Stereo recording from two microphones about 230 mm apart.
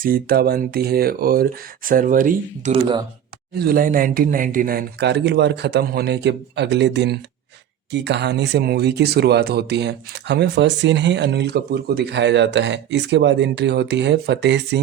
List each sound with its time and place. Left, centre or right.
0.0 s speech: right